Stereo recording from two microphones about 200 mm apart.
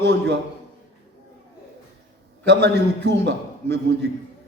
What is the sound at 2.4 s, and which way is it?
A man's voice, 60° right (ahead or behind).